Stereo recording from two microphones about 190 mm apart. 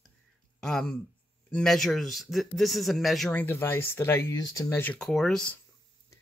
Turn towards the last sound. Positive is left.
turn(degrees=5)  # may be behind; listen again after turning